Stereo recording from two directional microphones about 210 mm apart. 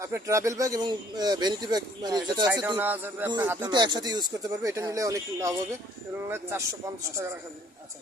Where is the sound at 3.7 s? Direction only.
20° right (ahead or behind).